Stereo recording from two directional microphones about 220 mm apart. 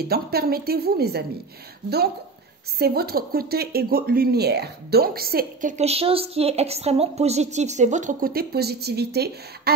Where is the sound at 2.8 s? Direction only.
45° right (ahead or behind).